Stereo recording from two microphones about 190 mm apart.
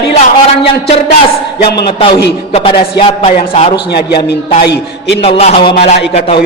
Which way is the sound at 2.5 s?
30° left (ahead or behind).